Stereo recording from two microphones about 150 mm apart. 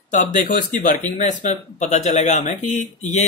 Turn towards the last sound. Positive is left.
turn(degrees=50)  # may be behind; listen again after turning